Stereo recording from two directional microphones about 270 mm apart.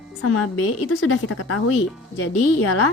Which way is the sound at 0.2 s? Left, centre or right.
Left.